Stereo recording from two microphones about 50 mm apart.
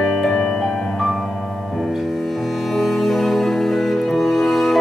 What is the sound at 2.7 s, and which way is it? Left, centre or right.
Music, centre.